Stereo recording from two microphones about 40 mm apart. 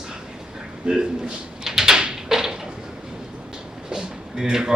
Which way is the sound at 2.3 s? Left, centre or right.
Centre.